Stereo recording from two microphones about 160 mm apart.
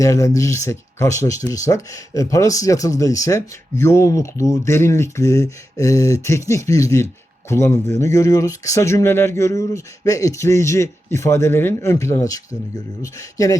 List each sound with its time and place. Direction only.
0.0 s speech: 20° left (ahead or behind)